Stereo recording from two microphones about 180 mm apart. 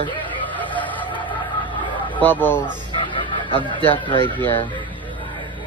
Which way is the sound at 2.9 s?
30° left (ahead or behind).